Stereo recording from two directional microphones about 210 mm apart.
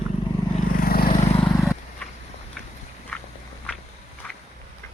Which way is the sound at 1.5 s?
15° left (ahead or behind).